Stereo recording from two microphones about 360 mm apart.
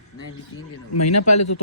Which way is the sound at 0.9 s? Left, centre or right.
Left.